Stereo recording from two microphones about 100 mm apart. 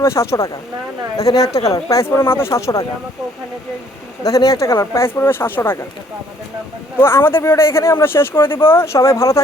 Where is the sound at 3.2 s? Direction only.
5° right (ahead or behind).